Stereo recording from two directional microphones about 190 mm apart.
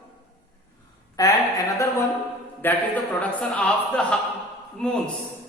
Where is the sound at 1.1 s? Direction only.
20° left (ahead or behind).